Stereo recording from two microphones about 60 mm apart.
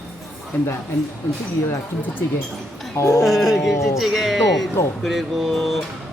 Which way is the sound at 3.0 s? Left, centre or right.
Left.